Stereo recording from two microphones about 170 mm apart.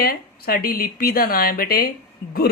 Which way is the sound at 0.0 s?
60° left (ahead or behind).